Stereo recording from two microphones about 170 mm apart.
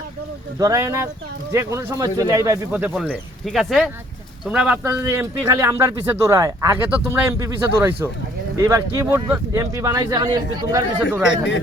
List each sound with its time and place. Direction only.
0.6 s speech: 20° right (ahead or behind)
2.7 s speech: 5° right (ahead or behind); by 10.8 s 25° right (ahead or behind)
11.2 s speech: 90° left